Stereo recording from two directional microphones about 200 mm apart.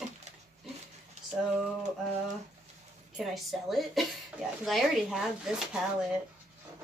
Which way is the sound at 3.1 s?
Centre (ahead or behind).